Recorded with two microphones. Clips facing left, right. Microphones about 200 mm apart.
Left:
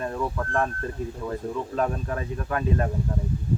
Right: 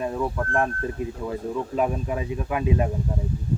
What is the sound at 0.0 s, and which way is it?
Speech, 10° right (ahead or behind).